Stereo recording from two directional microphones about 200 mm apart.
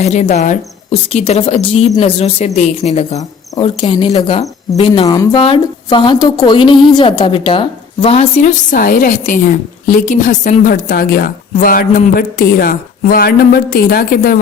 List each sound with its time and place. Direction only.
0.0 s a woman's voice: 35° left (ahead or behind)